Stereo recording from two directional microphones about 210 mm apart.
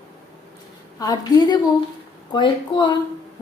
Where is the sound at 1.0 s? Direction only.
20° left (ahead or behind).